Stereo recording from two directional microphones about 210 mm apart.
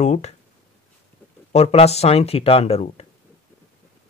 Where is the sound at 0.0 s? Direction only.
35° left (ahead or behind).